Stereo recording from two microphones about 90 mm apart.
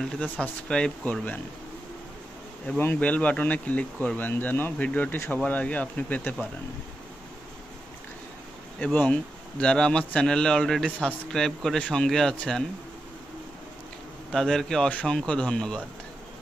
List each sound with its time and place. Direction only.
0.0 s speech: 10° left (ahead or behind)
2.8 s speech: 20° left (ahead or behind)
8.7 s speech: 15° left (ahead or behind)
14.3 s speech: 5° left (ahead or behind)